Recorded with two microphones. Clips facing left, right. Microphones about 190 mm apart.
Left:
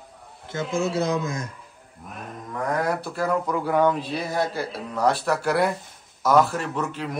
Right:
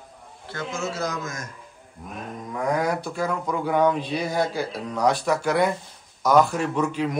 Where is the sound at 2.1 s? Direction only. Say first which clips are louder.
Right 2 dB; centre (ahead or behind).